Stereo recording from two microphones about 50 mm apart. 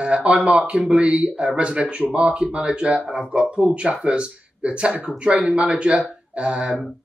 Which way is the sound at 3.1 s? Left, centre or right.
Centre.